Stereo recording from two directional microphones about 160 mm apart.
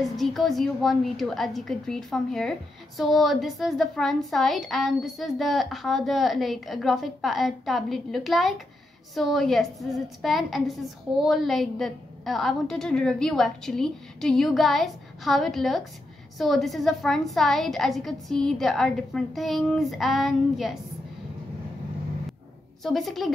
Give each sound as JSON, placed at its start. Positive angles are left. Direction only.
{"t": 0.1, "sound": "a woman's voice", "side_deg": 0}
{"t": 22.8, "sound": "a woman's voice", "side_deg": 0}